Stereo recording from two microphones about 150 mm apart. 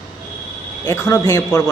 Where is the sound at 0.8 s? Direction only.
20° left (ahead or behind).